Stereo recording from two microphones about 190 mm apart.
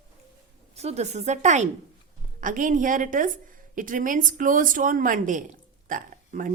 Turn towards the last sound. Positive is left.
turn(degrees=-45)  # may be behind; listen again after turning